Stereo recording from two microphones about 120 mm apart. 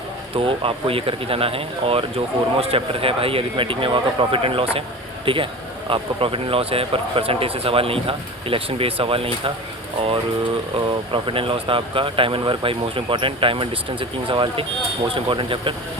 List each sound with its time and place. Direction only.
0.3 s speech: 50° right (ahead or behind)
11.1 s speech: 45° right (ahead or behind)